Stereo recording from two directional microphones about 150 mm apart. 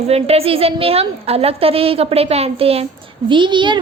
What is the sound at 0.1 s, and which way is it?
A woman's voice, 40° right (ahead or behind).